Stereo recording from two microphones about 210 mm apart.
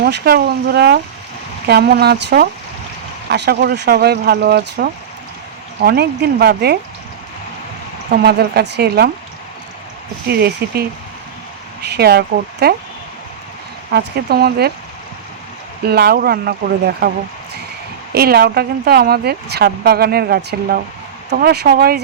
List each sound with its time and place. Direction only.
0.0 s speech: 50° right (ahead or behind)
8.1 s speech: 50° right (ahead or behind)
10.2 s speech: 50° right (ahead or behind)
11.9 s speech: 50° right (ahead or behind)
13.9 s speech: 50° right (ahead or behind)
15.9 s speech: 50° right (ahead or behind)
18.1 s speech: 50° right (ahead or behind)